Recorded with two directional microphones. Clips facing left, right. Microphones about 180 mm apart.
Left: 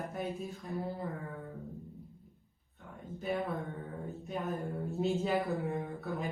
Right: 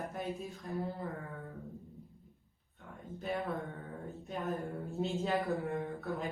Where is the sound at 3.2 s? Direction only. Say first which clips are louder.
Left 2 dB; centre (ahead or behind).